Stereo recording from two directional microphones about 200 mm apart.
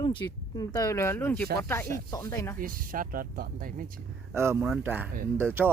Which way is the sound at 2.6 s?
45° right (ahead or behind).